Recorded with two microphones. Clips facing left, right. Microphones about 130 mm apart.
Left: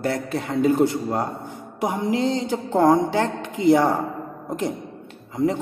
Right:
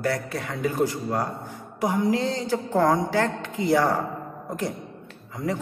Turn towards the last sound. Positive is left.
turn(degrees=25)  # may be behind; listen again after turning